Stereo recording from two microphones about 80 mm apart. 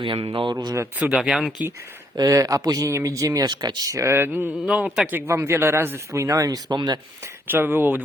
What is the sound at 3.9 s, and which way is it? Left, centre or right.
Speech, right.